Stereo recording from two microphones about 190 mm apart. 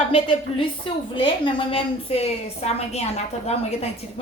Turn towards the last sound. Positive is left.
turn(degrees=35)  # may be behind; listen again after turning